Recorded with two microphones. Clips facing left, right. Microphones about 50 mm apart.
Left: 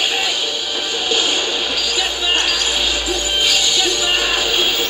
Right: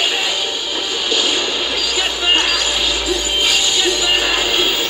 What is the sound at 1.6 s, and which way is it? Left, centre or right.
Basketball bounce, right.